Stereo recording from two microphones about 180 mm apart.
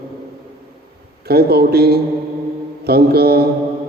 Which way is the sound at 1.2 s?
60° right (ahead or behind).